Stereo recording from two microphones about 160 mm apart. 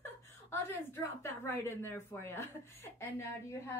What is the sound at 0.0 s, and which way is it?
A woman's voice, 15° left (ahead or behind).